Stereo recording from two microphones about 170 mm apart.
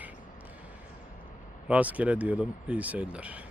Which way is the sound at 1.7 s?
10° right (ahead or behind).